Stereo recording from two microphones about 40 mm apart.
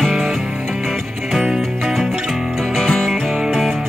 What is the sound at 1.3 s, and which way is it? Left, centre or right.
Music, centre.